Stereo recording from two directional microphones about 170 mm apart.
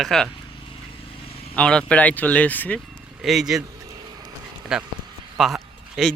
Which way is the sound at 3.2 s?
Centre (ahead or behind).